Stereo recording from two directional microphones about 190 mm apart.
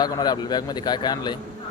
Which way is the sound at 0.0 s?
20° left (ahead or behind).